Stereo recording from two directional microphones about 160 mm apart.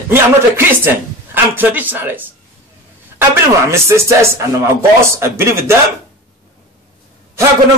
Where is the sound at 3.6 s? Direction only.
15° right (ahead or behind).